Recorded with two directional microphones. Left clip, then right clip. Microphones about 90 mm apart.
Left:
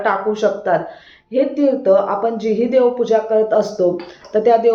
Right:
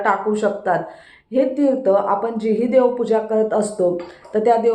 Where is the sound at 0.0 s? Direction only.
35° right (ahead or behind).